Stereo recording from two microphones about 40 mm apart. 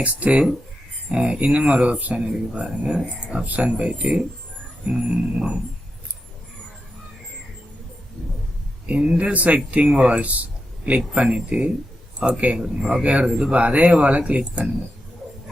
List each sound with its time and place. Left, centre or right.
0.0 s speech: right
8.9 s speech: right
9.8 s speech: right